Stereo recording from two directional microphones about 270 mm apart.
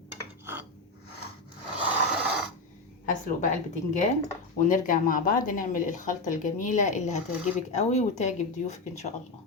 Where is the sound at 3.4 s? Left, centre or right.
Left.